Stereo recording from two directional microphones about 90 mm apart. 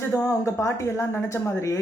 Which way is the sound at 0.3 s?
35° left (ahead or behind).